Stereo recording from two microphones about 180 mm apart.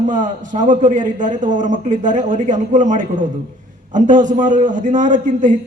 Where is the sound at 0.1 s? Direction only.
45° right (ahead or behind).